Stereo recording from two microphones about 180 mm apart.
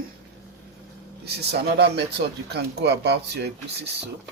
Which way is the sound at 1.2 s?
65° right (ahead or behind).